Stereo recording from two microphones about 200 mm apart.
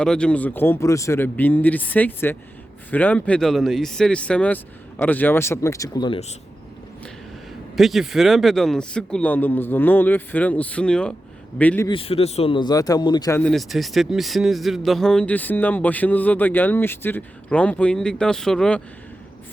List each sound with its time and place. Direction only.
0.0 s speech: 5° left (ahead or behind); by 6.1 s 20° left (ahead or behind)
7.8 s speech: centre (ahead or behind)
11.9 s a man's voice: 30° left (ahead or behind)
13.4 s speech: centre (ahead or behind)